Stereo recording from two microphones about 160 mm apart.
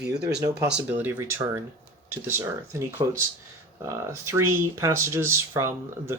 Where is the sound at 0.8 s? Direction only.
10° right (ahead or behind).